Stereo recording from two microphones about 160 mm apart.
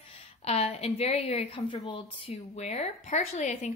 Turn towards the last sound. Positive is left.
turn(degrees=50)  # may be behind; listen again after turning